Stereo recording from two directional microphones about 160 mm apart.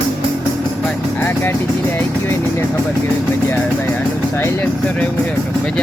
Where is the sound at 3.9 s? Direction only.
15° left (ahead or behind).